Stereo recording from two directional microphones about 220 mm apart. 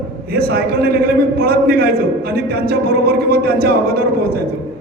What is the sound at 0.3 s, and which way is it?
A man's voice, 45° right (ahead or behind).